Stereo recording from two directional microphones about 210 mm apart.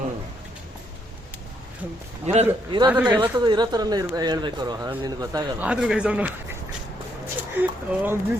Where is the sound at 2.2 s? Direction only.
30° right (ahead or behind).